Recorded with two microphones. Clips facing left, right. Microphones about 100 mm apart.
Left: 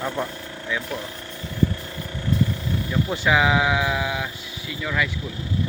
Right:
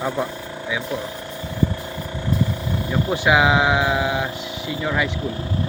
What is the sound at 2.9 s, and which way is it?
Speech, 15° right (ahead or behind).